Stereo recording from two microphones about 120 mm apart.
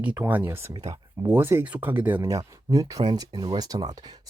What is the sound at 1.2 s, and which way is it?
Speech, 15° right (ahead or behind).